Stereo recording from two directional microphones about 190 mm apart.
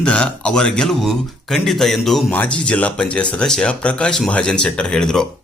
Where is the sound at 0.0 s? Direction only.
5° left (ahead or behind).